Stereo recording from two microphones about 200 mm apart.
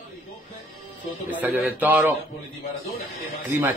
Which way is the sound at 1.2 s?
10° right (ahead or behind).